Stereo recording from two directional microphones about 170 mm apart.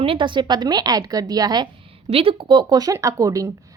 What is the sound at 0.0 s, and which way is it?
A woman's voice, 30° right (ahead or behind).